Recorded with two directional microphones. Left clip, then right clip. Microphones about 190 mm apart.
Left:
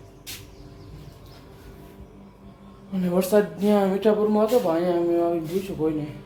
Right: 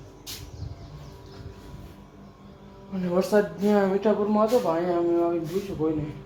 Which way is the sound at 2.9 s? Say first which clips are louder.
Left 2 dB; 20° left (ahead or behind).